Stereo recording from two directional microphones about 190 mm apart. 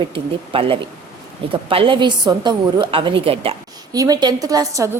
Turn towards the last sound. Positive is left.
turn(degrees=-20)  # may be behind; listen again after turning